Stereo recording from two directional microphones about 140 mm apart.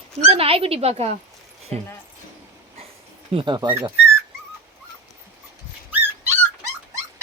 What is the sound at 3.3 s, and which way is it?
Speech, 35° right (ahead or behind).